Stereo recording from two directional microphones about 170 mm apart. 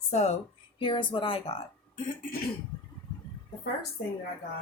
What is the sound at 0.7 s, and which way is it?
Speech, 30° left (ahead or behind).